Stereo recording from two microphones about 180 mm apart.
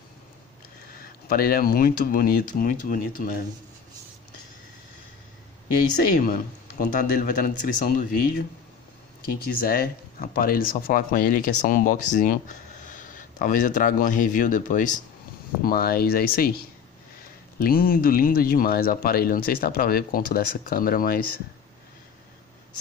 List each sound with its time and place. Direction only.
1.3 s speech: 55° left (ahead or behind)
5.8 s speech: 50° left (ahead or behind)
17.6 s speech: 55° left (ahead or behind)